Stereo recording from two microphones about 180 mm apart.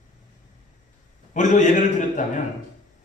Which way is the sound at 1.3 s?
45° left (ahead or behind).